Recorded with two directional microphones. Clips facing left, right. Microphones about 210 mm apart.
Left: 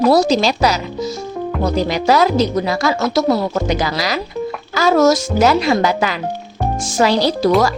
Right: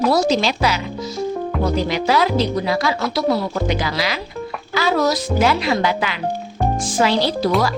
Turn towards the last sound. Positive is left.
turn(degrees=40)  # may be behind; listen again after turning